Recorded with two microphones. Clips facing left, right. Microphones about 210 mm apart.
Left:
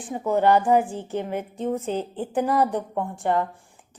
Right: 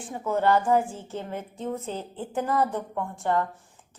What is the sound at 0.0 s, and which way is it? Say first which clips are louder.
A woman's voice: left 4 dB; 15° left (ahead or behind).